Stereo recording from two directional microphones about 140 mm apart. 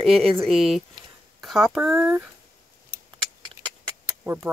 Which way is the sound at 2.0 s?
15° right (ahead or behind).